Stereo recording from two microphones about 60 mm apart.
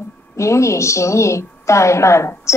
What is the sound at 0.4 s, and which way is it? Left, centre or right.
A woman's voice, left.